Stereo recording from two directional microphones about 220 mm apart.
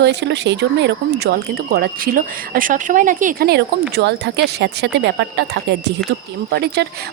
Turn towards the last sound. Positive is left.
turn(degrees=-50)  # may be behind; listen again after turning